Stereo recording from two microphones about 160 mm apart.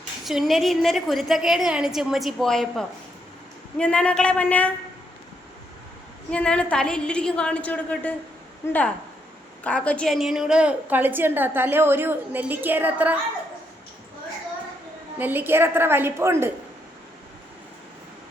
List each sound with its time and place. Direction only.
0.3 s a woman's voice: centre (ahead or behind)
6.3 s a woman's voice: 5° left (ahead or behind); by 13.1 s 10° right (ahead or behind)
15.2 s a woman's voice: 10° right (ahead or behind)